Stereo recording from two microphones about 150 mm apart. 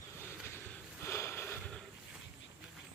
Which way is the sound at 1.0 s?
15° left (ahead or behind).